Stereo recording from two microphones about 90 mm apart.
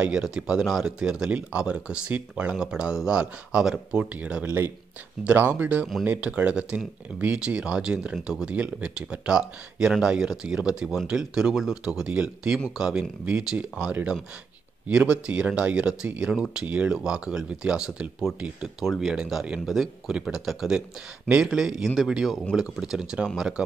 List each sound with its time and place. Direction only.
0.0 s speech: 10° right (ahead or behind)
12.5 s speech: centre (ahead or behind)
13.2 s speech: 10° right (ahead or behind)